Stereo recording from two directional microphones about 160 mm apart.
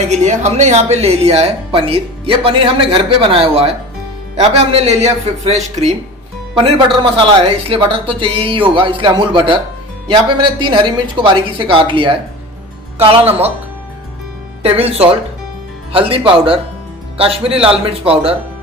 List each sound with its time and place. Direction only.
0.1 s speech: 45° right (ahead or behind)
6.6 s speech: 35° right (ahead or behind)
14.6 s speech: 40° right (ahead or behind)